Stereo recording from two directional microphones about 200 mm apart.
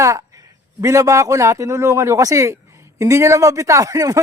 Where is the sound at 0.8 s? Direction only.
15° right (ahead or behind).